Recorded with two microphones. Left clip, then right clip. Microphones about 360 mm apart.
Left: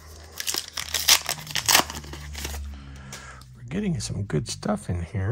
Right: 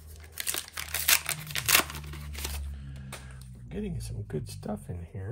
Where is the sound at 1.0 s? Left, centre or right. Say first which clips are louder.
Left 6 dB; centre.